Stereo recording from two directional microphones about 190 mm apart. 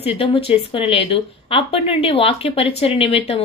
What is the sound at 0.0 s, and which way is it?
Speech, 30° left (ahead or behind).